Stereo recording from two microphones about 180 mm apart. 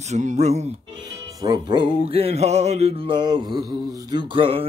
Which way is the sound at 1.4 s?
20° right (ahead or behind).